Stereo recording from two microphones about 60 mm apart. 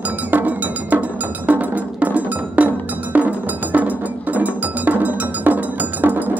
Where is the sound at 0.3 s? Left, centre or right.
Right.